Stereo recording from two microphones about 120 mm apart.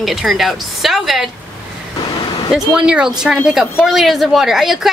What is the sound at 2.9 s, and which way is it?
A woman's voice, 5° right (ahead or behind).